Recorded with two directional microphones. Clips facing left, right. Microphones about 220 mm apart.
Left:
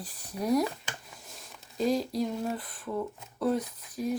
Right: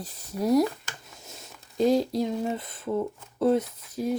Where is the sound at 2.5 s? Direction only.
25° right (ahead or behind).